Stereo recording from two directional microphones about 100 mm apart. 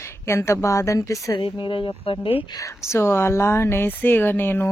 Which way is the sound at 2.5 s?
25° left (ahead or behind).